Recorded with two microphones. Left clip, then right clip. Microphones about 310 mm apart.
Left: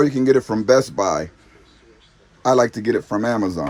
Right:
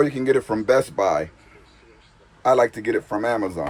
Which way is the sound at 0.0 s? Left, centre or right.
Centre.